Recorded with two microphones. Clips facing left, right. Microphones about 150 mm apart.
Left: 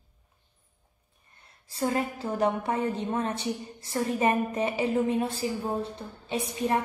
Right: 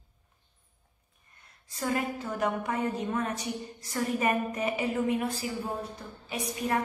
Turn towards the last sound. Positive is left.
turn(degrees=25)  # may be behind; listen again after turning